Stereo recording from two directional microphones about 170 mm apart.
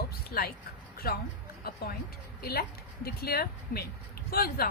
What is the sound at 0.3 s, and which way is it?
Speech, 60° left (ahead or behind).